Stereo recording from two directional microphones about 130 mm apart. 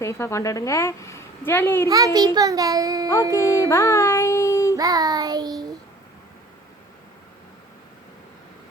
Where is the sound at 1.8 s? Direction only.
30° right (ahead or behind).